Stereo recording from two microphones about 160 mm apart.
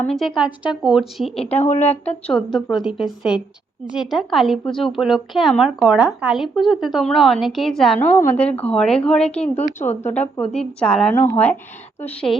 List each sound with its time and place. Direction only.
0.0 s speech: centre (ahead or behind)
1.5 s a woman's voice: 45° left (ahead or behind)
2.0 s speech: 5° left (ahead or behind)
7.9 s a woman's voice: 15° left (ahead or behind)